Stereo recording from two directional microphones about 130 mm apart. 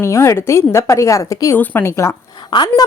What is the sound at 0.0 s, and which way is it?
A woman's voice, 20° left (ahead or behind).